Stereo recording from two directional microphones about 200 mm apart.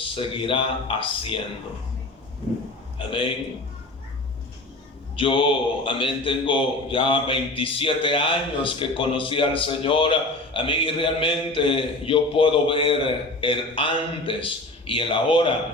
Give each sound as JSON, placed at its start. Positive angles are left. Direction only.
{"t": 0.0, "sound": "a man's voice", "side_deg": 25}
{"t": 3.0, "sound": "a man's voice", "side_deg": 25}
{"t": 5.1, "sound": "a man's voice", "side_deg": 25}